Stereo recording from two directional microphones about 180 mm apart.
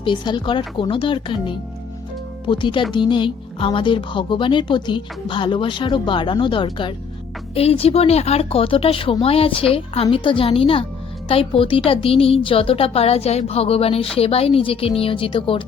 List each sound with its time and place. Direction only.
0.0 s speech: 25° left (ahead or behind)